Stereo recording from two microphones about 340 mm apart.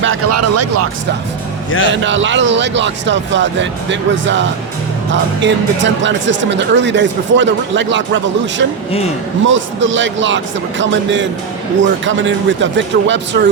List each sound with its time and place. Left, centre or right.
0.0 s speech: right
1.9 s speech: right